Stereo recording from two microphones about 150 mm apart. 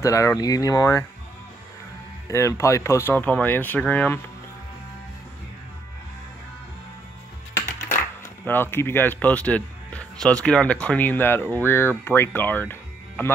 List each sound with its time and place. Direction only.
0.0 s speech: 20° left (ahead or behind)
2.2 s speech: 20° left (ahead or behind)
8.5 s speech: 15° left (ahead or behind)